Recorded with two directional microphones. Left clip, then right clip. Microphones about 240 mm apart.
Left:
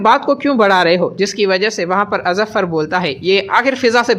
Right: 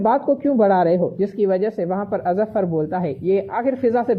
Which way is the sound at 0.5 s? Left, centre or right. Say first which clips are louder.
Left 5 dB; left.